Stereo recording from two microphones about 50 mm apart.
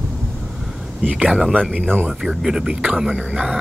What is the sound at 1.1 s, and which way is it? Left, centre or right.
Speech, centre.